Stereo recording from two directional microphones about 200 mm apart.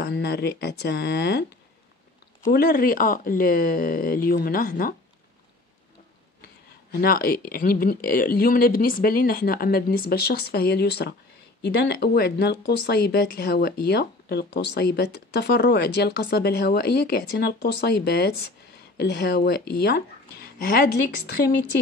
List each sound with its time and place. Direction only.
0.0 s speech: 50° left (ahead or behind)
2.4 s speech: 50° left (ahead or behind)
6.9 s speech: 50° left (ahead or behind)